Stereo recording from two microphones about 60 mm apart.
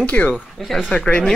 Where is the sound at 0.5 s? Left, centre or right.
Centre.